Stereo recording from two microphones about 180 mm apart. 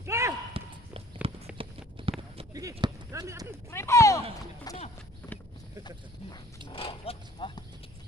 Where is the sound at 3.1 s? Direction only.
20° right (ahead or behind).